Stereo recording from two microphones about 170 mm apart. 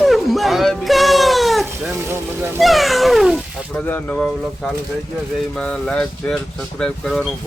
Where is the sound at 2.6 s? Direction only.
Centre (ahead or behind).